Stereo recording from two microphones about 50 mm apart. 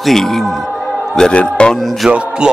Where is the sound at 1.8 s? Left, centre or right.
Centre.